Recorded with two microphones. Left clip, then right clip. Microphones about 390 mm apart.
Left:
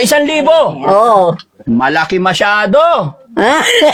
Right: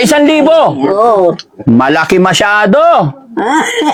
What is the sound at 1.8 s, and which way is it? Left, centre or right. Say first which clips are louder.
Speech: right 2 dB; right.